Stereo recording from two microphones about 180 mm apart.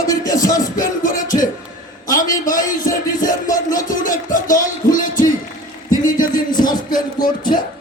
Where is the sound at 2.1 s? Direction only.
50° left (ahead or behind).